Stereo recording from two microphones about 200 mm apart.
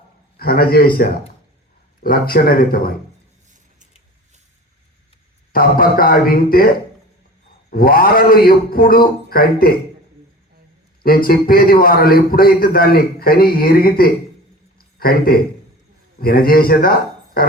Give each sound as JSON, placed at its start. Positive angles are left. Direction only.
{"t": 0.3, "sound": "a man's voice", "side_deg": 50}
{"t": 2.0, "sound": "a man's voice", "side_deg": 45}
{"t": 5.5, "sound": "a man's voice", "side_deg": 45}
{"t": 7.7, "sound": "a man's voice", "side_deg": 45}
{"t": 11.0, "sound": "a man's voice", "side_deg": 45}
{"t": 14.8, "sound": "a sound", "side_deg": 50}
{"t": 16.2, "sound": "a man's voice", "side_deg": 45}